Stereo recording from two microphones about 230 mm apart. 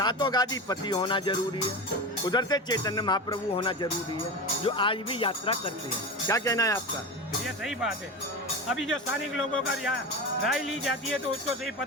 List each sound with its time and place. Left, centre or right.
0.0 s speech: centre
7.4 s speech: centre